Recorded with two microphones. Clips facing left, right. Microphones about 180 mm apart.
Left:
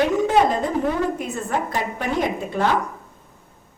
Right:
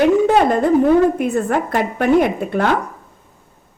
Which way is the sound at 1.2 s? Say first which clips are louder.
Right 7 dB; 60° right (ahead or behind).